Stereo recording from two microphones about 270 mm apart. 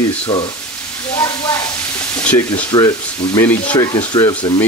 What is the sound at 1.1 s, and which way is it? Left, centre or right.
Speech, centre.